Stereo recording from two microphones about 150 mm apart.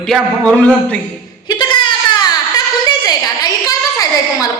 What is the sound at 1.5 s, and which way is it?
Baby cry, 30° left (ahead or behind).